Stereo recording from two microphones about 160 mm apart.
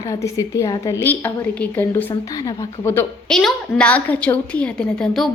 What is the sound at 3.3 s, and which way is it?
A woman's voice, 5° left (ahead or behind).